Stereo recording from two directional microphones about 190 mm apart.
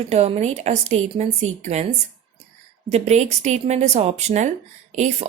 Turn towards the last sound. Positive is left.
turn(degrees=-35)  # may be behind; listen again after turning